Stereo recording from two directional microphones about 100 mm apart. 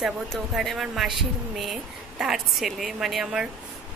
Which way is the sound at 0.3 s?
Centre (ahead or behind).